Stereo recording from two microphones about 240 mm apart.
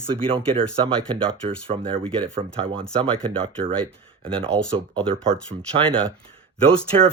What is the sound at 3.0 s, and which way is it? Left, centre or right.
Speech, right.